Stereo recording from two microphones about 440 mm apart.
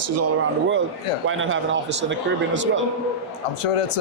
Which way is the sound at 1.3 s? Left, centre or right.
Right.